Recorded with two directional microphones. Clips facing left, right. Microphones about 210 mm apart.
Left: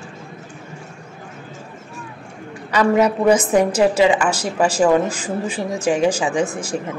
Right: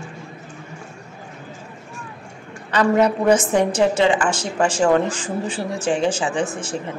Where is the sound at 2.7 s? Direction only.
10° left (ahead or behind).